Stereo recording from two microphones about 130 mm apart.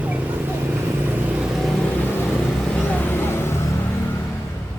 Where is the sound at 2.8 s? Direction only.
15° left (ahead or behind).